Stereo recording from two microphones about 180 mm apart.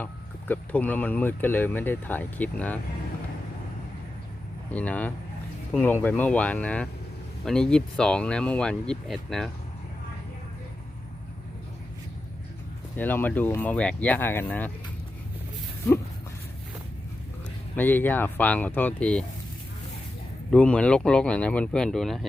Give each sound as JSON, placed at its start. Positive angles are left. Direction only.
{"t": 0.0, "sound": "speech", "side_deg": 10}
{"t": 4.7, "sound": "speech", "side_deg": 10}
{"t": 13.0, "sound": "speech", "side_deg": 10}
{"t": 17.7, "sound": "speech", "side_deg": 10}
{"t": 20.5, "sound": "speech", "side_deg": 5}